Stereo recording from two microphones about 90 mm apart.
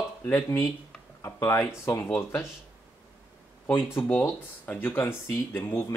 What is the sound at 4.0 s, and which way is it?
Speech, 25° left (ahead or behind).